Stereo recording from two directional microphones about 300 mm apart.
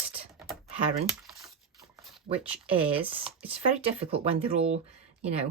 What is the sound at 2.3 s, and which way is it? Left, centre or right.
Speech, centre.